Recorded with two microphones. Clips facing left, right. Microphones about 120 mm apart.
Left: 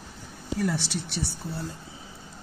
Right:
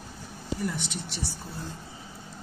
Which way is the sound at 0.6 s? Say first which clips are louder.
Left 6 dB; 75° left (ahead or behind).